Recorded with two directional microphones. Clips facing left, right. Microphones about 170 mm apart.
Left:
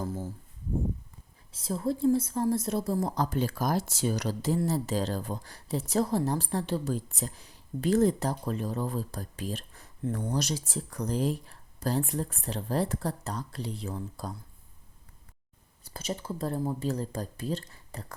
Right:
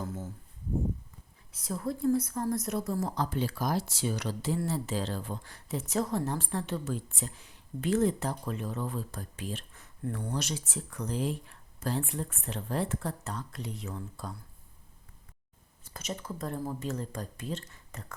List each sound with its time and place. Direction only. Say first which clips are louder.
1.5 s a woman's voice: left 4 dB; 30° left (ahead or behind)
15.8 s speech: left 3 dB; 30° left (ahead or behind)